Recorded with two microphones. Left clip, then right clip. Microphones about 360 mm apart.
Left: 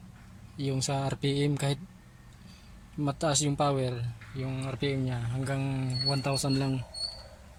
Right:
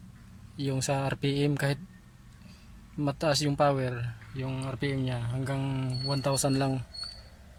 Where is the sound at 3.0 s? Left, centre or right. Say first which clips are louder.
Right 1 dB; centre.